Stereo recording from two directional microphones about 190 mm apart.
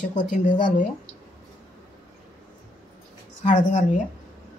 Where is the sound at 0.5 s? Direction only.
25° left (ahead or behind).